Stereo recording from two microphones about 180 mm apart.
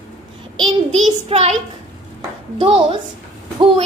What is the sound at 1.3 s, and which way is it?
Speech, 30° right (ahead or behind).